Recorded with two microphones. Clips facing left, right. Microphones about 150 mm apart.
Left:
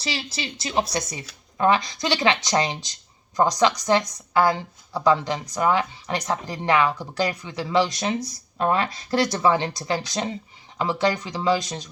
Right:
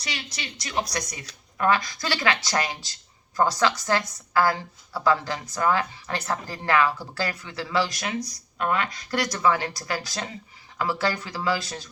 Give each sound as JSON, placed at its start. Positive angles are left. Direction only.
{"t": 0.0, "sound": "speech", "side_deg": 30}